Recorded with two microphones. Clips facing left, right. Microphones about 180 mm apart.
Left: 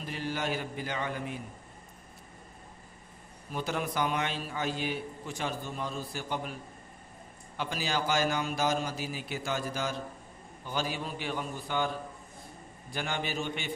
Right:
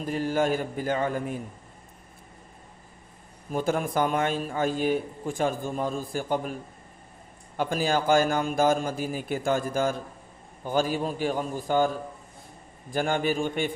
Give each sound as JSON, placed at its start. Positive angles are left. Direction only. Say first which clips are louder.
{"t": 0.0, "sound": "a man's voice", "louder": "right 9 dB", "side_deg": -45}
{"t": 3.5, "sound": "a man's voice", "louder": "right 7 dB", "side_deg": -45}
{"t": 12.9, "sound": "a man's voice", "louder": "right 9 dB", "side_deg": -50}